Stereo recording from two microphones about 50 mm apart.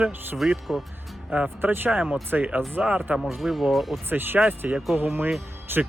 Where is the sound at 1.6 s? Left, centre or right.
Right.